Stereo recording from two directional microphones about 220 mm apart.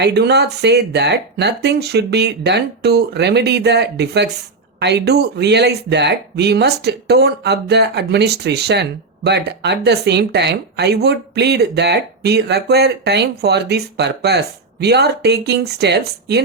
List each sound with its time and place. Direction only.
0.0 s speech: 50° right (ahead or behind)